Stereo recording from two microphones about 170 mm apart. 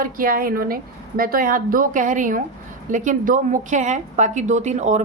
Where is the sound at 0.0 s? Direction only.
55° right (ahead or behind).